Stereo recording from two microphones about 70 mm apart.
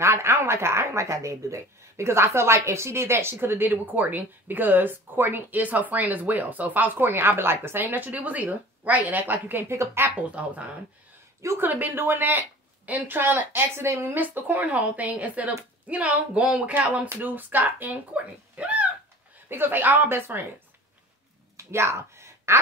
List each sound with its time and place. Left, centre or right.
0.0 s speech: right
10.4 s a woman's voice: centre
11.4 s a woman's voice: right
19.5 s speech: right
21.5 s a sound: right